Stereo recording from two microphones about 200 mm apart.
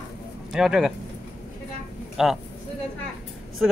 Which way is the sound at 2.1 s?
Centre (ahead or behind).